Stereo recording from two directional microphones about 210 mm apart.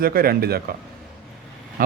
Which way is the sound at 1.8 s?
40° right (ahead or behind).